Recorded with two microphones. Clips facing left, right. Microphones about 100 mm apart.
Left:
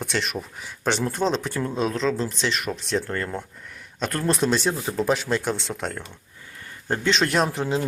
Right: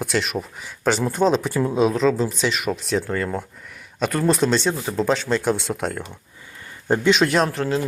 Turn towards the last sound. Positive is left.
turn(degrees=15)  # may be behind; listen again after turning